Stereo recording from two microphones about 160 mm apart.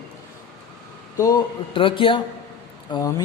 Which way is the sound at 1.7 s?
35° left (ahead or behind).